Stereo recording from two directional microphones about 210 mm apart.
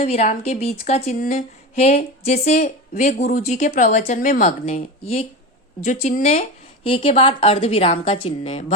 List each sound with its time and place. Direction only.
0.0 s a woman's voice: 30° left (ahead or behind)